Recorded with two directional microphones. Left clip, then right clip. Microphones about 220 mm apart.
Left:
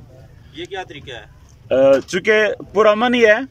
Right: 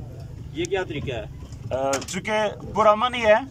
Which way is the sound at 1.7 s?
45° left (ahead or behind).